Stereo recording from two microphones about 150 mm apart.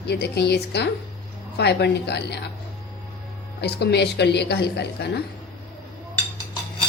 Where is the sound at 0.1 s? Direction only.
90° left.